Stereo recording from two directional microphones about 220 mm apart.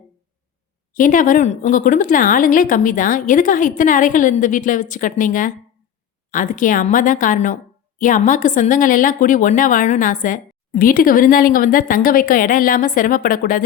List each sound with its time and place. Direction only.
0.9 s a woman's voice: 35° left (ahead or behind)